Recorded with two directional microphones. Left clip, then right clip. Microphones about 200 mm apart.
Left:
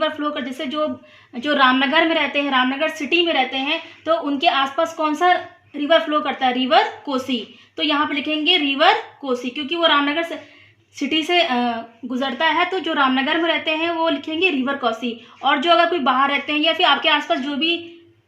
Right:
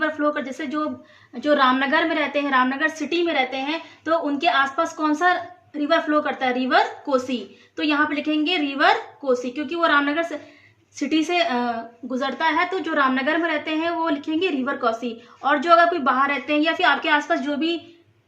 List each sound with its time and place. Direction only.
0.0 s a woman's voice: 30° left (ahead or behind)